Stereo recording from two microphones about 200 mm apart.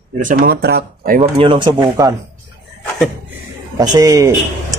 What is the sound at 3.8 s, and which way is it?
Speech, 20° right (ahead or behind).